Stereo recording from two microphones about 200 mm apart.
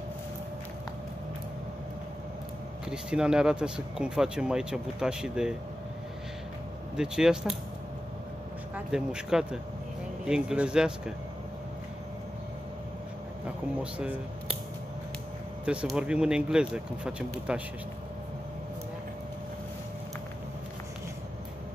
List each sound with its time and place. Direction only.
2.9 s speech: 5° right (ahead or behind)
7.0 s speech: 5° right (ahead or behind)
8.7 s speech: 5° right (ahead or behind)
13.9 s speech: 5° right (ahead or behind)
15.6 s speech: 5° right (ahead or behind)